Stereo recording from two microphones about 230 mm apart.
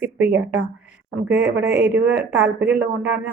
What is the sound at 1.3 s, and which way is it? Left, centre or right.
Speech, right.